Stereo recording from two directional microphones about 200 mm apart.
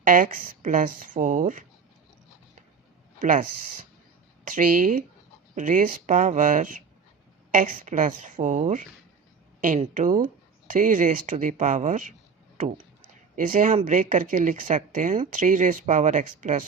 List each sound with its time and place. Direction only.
0.0 s speech: 40° right (ahead or behind)
3.2 s speech: 40° right (ahead or behind)
4.4 s speech: 40° right (ahead or behind)
13.3 s speech: 40° right (ahead or behind)